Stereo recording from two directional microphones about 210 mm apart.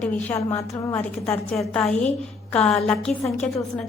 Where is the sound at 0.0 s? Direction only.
10° left (ahead or behind).